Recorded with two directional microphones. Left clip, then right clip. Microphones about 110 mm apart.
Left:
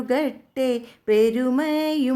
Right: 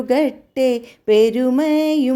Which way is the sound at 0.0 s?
25° right (ahead or behind).